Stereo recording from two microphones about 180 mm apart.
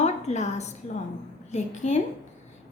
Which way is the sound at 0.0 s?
40° left (ahead or behind).